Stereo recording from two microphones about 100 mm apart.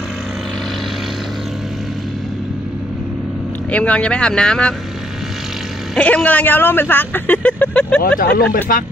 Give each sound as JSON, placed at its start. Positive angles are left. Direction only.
{"t": 3.7, "sound": "speech", "side_deg": 15}
{"t": 5.9, "sound": "speech", "side_deg": 15}